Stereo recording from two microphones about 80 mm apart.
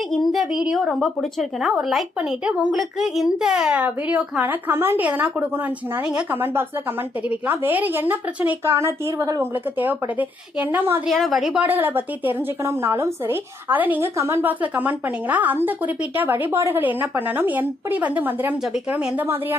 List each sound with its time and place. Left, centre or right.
0.3 s a woman's voice: centre
3.8 s a woman's voice: centre
6.3 s a woman's voice: right
9.7 s a woman's voice: right
11.0 s speech: centre
11.6 s a woman's voice: right
14.2 s speech: right
14.4 s a woman's voice: right